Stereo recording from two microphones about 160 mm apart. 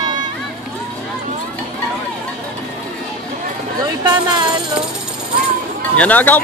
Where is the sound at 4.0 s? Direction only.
25° right (ahead or behind).